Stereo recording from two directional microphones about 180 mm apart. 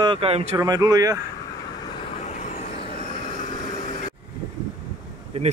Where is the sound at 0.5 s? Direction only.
20° right (ahead or behind).